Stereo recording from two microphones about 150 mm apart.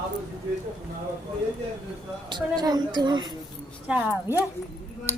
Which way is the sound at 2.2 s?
30° right (ahead or behind).